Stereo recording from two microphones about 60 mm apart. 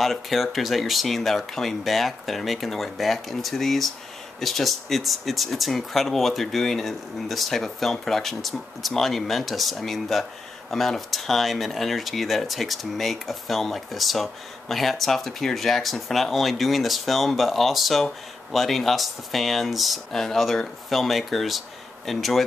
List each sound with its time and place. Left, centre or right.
0.0 s speech: centre